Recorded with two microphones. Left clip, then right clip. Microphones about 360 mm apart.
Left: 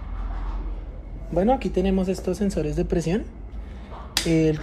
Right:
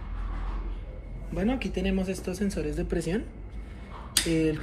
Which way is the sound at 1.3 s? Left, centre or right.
Centre.